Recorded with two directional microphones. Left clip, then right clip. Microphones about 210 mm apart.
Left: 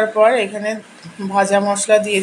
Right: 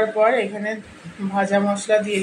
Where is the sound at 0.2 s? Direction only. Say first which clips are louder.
Left 6 dB; 20° left (ahead or behind).